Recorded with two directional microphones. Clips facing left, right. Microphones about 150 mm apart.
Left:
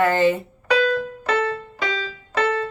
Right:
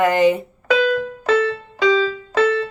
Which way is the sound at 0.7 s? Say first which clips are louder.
Right 2 dB; 40° left (ahead or behind).